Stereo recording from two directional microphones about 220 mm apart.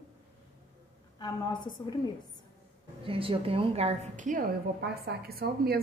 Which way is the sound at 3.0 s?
25° right (ahead or behind).